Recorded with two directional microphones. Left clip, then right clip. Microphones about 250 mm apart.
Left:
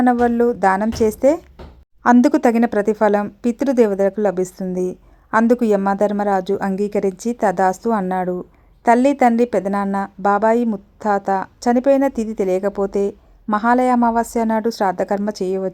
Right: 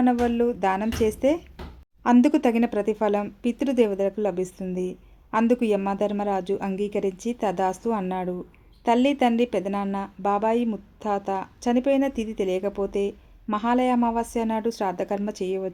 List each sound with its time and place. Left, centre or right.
0.0 s speech: centre